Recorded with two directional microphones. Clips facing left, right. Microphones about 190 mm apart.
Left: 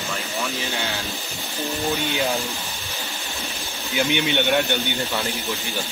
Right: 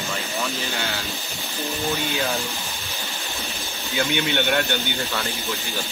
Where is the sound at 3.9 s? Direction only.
15° left (ahead or behind).